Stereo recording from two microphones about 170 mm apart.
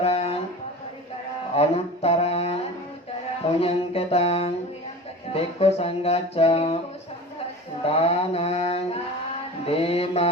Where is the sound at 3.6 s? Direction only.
35° left (ahead or behind).